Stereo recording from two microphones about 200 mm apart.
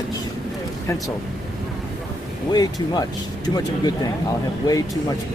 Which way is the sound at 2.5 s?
20° left (ahead or behind).